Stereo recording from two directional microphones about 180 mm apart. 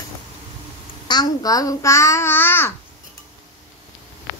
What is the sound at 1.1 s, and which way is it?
A child's voice, 20° left (ahead or behind).